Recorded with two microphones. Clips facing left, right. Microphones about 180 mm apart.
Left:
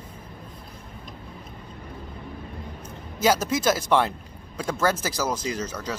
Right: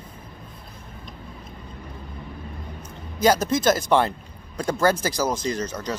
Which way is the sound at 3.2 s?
5° left (ahead or behind).